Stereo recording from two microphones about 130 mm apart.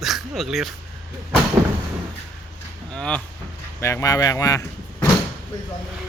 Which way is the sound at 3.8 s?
20° left (ahead or behind).